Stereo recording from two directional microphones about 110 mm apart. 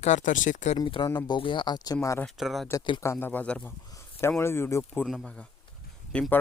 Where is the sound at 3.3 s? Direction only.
10° left (ahead or behind).